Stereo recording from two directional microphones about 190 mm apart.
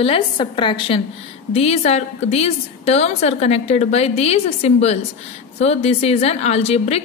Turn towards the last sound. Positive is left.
turn(degrees=35)  # may be behind; listen again after turning